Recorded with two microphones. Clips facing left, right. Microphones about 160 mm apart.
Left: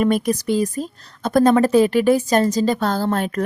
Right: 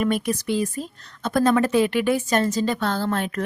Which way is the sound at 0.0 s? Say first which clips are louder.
Left 4 dB; 40° left (ahead or behind).